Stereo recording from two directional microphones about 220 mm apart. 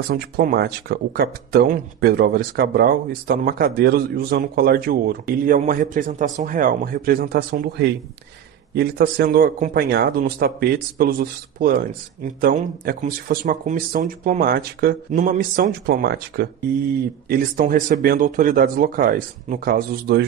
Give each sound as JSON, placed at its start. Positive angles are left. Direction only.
{"t": 0.1, "sound": "speech", "side_deg": -45}